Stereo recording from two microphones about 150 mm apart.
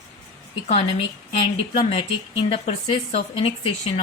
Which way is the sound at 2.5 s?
40° left (ahead or behind).